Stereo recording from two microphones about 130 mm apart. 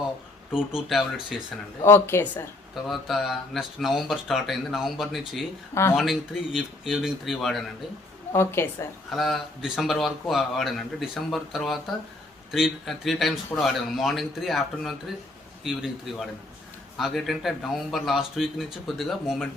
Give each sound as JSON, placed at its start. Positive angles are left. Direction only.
{"t": 0.5, "sound": "a man's voice", "side_deg": -5}
{"t": 1.8, "sound": "a woman's voice", "side_deg": 20}
{"t": 2.8, "sound": "a man's voice", "side_deg": 0}
{"t": 5.7, "sound": "a woman's voice", "side_deg": 20}
{"t": 6.0, "sound": "a man's voice", "side_deg": 0}
{"t": 8.3, "sound": "a woman's voice", "side_deg": 20}
{"t": 9.1, "sound": "a man's voice", "side_deg": 0}